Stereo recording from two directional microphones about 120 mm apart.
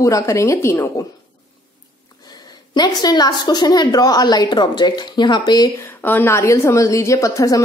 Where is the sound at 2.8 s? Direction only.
35° left (ahead or behind).